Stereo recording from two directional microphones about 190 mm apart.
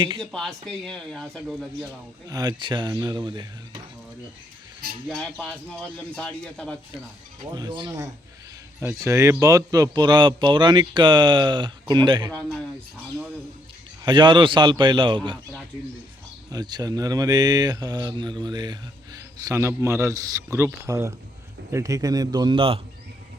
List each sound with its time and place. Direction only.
0.2 s speech: centre (ahead or behind)
2.3 s speech: 20° right (ahead or behind)
5.2 s speech: centre (ahead or behind)
7.5 s speech: 25° right (ahead or behind)
14.0 s speech: 25° right (ahead or behind)
16.5 s speech: 20° right (ahead or behind)